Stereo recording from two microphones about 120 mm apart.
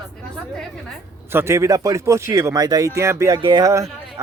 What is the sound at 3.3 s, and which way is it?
Speech, 35° right (ahead or behind).